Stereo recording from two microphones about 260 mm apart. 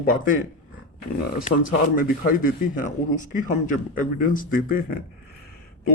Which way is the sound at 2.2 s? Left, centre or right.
Left.